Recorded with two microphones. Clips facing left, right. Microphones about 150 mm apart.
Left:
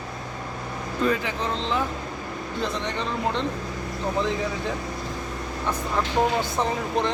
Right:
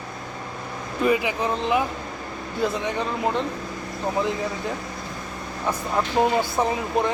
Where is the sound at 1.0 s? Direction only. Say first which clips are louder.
Right 4 dB; 10° right (ahead or behind).